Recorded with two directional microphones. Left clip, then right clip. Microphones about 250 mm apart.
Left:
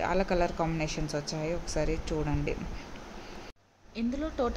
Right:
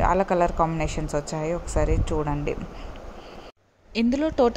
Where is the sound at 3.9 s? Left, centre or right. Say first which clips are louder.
Right 10 dB; right.